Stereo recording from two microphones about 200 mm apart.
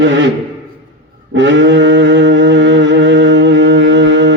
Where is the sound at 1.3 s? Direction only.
65° right (ahead or behind).